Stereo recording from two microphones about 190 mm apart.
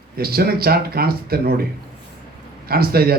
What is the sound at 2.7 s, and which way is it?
Speech, 55° right (ahead or behind).